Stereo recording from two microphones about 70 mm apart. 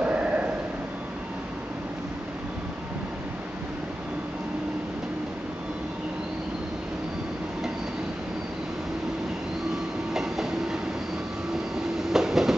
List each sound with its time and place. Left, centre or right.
0.0 s a sound: centre
10.1 s train: centre
12.1 s train: centre